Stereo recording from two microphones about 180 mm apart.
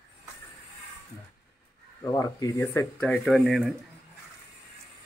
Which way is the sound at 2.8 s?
5° left (ahead or behind).